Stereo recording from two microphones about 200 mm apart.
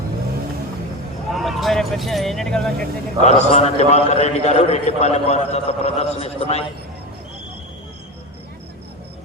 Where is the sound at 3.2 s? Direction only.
35° left (ahead or behind).